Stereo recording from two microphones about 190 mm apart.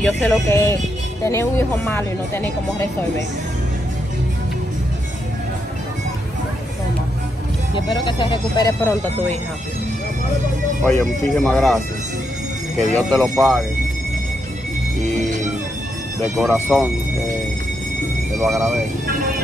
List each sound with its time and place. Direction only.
0.0 s speech: 5° left (ahead or behind)
7.7 s speech: 25° left (ahead or behind)
10.8 s speech: 10° left (ahead or behind)
12.9 s speech: centre (ahead or behind)
16.3 s speech: centre (ahead or behind)
18.4 s speech: centre (ahead or behind)